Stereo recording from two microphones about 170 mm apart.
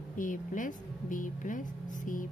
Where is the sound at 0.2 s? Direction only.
50° left (ahead or behind).